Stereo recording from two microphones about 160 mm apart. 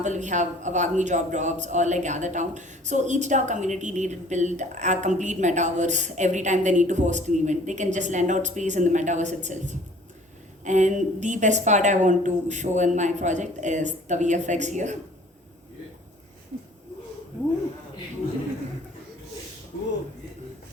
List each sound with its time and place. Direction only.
0.0 s a man's voice: 50° right (ahead or behind)